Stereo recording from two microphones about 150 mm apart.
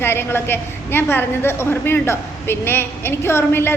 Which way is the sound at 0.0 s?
15° left (ahead or behind).